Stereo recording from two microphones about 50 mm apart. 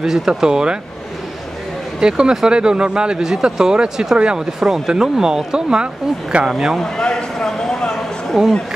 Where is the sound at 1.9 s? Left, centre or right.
Centre.